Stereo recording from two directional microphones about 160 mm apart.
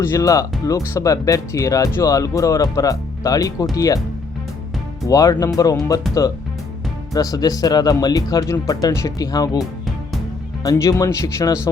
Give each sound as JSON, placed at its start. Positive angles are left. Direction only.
{"t": 0.0, "sound": "speech", "side_deg": 20}
{"t": 5.0, "sound": "speech", "side_deg": 20}